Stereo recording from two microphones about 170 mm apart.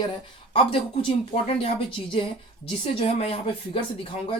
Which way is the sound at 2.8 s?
35° left (ahead or behind).